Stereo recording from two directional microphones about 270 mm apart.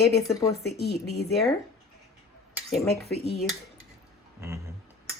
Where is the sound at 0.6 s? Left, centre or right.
Left.